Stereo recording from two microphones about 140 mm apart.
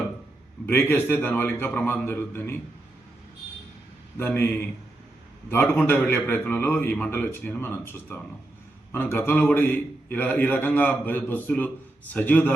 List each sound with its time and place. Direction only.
0.6 s a man's voice: 15° left (ahead or behind)
4.2 s a man's voice: 15° left (ahead or behind)